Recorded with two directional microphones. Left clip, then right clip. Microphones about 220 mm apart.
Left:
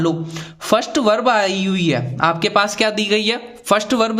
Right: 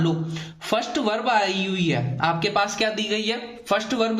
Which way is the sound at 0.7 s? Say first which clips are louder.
Left 8 dB; 50° left (ahead or behind).